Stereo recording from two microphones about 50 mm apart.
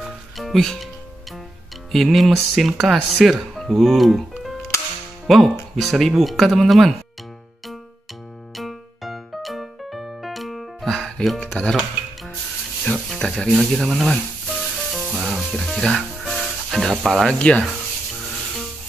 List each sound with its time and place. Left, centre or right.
0.4 s music: centre
1.9 s speech: centre
4.4 s music: centre
5.2 s speech: centre
8.5 s music: centre
11.3 s speech: left
12.9 s speech: centre
14.6 s sizzle: centre
15.0 s music: centre
15.6 s speech: centre
16.3 s sizzle: centre
16.9 s speech: centre
17.3 s speech: left